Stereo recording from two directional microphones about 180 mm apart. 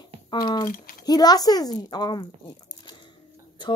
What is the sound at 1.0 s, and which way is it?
A child's voice, 20° left (ahead or behind).